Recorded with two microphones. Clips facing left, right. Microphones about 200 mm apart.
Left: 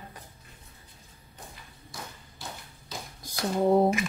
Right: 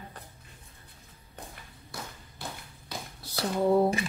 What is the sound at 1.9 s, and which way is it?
Tap, 60° right (ahead or behind).